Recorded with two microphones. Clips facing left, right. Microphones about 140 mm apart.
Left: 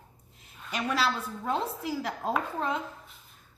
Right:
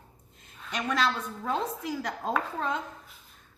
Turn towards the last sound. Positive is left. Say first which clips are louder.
# even
turn(degrees=5)  # may be behind; listen again after turning